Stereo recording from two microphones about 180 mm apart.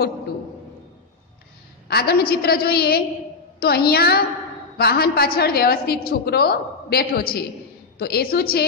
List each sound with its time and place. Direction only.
1.9 s a woman's voice: 60° left (ahead or behind)